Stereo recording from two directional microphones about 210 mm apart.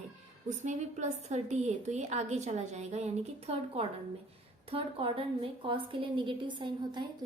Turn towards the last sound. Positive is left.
turn(degrees=-20)  # may be behind; listen again after turning